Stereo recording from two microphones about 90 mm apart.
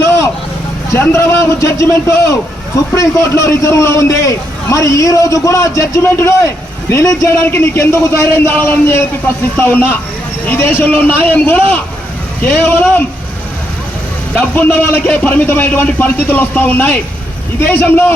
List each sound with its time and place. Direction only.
0.9 s a man's voice: 30° left (ahead or behind)
2.9 s a man's voice: 35° left (ahead or behind)
14.3 s a man's voice: 20° left (ahead or behind)